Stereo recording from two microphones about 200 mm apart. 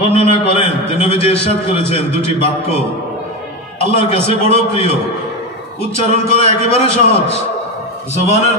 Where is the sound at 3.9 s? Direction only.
30° left (ahead or behind).